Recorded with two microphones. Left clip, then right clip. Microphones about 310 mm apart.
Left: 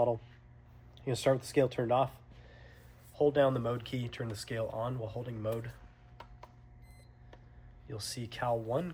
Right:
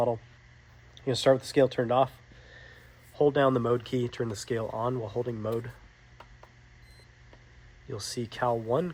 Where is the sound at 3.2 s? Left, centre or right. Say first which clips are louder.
Right 4 dB; centre.